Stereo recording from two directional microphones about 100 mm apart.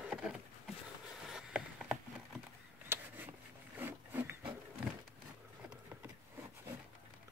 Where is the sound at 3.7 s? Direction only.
20° right (ahead or behind).